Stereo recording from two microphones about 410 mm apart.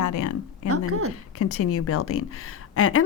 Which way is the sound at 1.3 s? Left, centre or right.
Left.